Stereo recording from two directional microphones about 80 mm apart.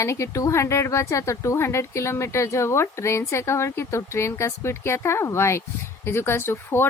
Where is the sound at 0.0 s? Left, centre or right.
Left.